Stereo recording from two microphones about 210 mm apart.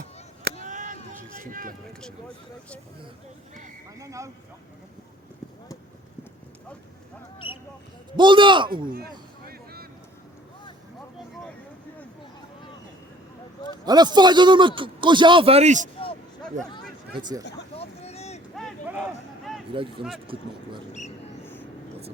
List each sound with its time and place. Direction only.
0.6 s a sound: 40° right (ahead or behind)
1.4 s run: 40° right (ahead or behind)
3.9 s speech: 15° right (ahead or behind)
7.3 s speech: 25° left (ahead or behind)
8.1 s a man's voice: 20° right (ahead or behind)
13.8 s a man's voice: 20° right (ahead or behind)
17.2 s a man's voice: 20° right (ahead or behind)
17.7 s boat: 30° left (ahead or behind)
18.5 s a sound: centre (ahead or behind)
19.7 s a man's voice: 25° right (ahead or behind)